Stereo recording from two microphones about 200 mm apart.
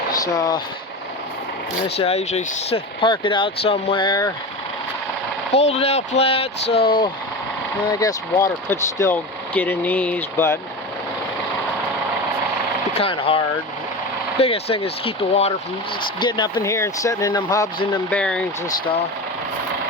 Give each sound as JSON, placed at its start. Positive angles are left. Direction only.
{"t": 0.2, "sound": "speech", "side_deg": 20}
{"t": 2.0, "sound": "speech", "side_deg": 30}
{"t": 5.5, "sound": "speech", "side_deg": 30}
{"t": 13.0, "sound": "speech", "side_deg": 25}
{"t": 14.4, "sound": "speech", "side_deg": 30}
{"t": 18.1, "sound": "speech", "side_deg": 5}